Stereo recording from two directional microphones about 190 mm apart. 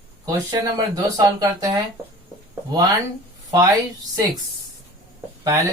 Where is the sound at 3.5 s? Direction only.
20° right (ahead or behind).